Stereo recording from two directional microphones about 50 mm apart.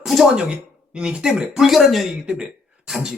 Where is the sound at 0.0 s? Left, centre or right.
Centre.